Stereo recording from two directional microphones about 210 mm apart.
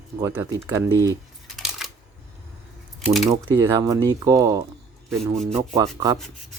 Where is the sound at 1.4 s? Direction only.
Centre (ahead or behind).